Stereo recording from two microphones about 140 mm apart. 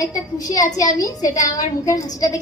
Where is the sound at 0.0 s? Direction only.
25° left (ahead or behind).